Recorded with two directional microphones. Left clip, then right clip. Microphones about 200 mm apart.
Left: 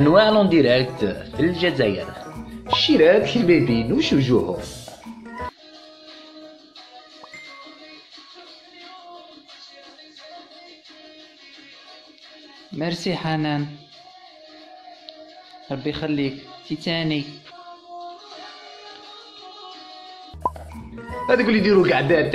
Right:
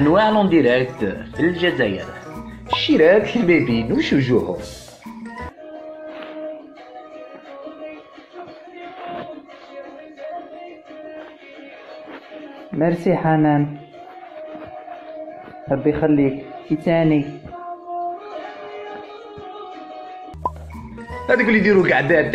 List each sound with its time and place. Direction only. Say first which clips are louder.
0.0 s speech: even; 30° left (ahead or behind)
2.7 s speech: right 1 dB; 15° left (ahead or behind)
12.7 s speech: right 7 dB; 60° left (ahead or behind)
15.7 s speech: right 8 dB; 60° left (ahead or behind)
20.4 s music: even; centre (ahead or behind)
21.3 s speech: right 2 dB; 25° left (ahead or behind)